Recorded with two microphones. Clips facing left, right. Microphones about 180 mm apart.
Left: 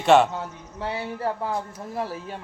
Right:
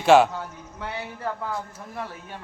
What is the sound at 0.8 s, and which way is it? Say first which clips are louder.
Speech: left 4 dB; 30° left (ahead or behind).